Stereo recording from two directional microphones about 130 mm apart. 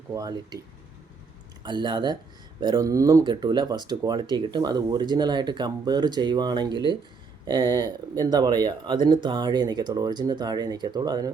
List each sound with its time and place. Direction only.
0.1 s speech: 25° right (ahead or behind)
1.6 s speech: 35° right (ahead or behind)